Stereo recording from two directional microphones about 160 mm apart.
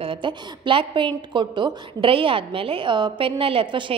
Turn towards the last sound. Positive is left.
turn(degrees=-30)  # may be behind; listen again after turning